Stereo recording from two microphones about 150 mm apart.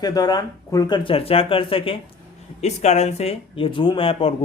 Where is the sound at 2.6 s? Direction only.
50° left (ahead or behind).